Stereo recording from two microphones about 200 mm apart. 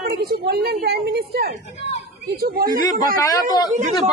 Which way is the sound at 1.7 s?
35° left (ahead or behind).